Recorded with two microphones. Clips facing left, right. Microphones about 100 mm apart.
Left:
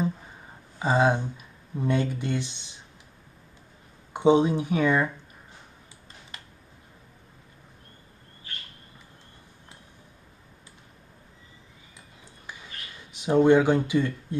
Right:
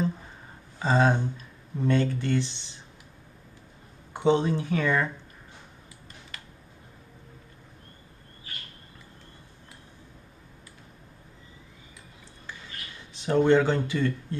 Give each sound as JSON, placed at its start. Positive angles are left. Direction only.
{"t": 0.7, "sound": "speech", "side_deg": 15}
{"t": 4.1, "sound": "speech", "side_deg": 15}
{"t": 13.1, "sound": "speech", "side_deg": 15}